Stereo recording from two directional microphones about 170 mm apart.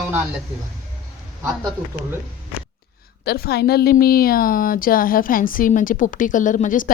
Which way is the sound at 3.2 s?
65° left (ahead or behind).